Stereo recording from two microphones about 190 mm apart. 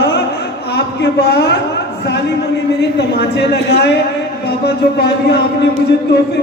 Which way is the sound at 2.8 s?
60° left (ahead or behind).